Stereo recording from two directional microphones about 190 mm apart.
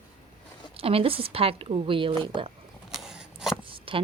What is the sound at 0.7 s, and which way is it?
Speech, 30° right (ahead or behind).